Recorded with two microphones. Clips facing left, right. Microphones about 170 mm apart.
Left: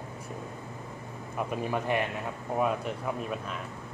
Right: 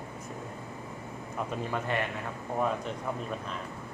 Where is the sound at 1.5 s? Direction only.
15° left (ahead or behind).